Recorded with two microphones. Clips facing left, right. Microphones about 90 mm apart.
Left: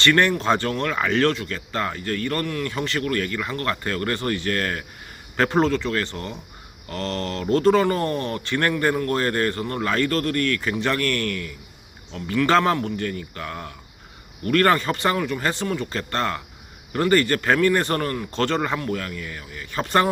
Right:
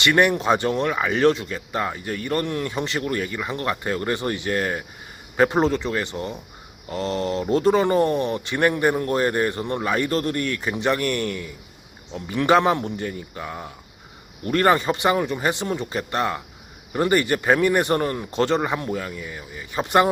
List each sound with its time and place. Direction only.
0.0 s speech: 15° right (ahead or behind)